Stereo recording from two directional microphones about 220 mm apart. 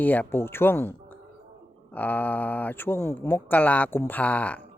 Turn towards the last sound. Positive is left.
turn(degrees=5)  # may be behind; listen again after turning